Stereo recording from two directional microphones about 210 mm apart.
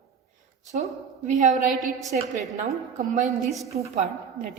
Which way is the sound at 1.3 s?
35° right (ahead or behind).